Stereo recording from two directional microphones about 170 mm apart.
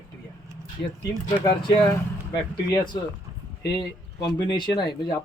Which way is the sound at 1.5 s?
25° left (ahead or behind).